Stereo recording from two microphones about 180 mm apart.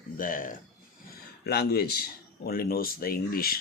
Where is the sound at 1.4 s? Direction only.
60° left (ahead or behind).